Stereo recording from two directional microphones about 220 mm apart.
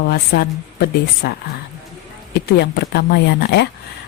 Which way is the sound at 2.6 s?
45° left (ahead or behind).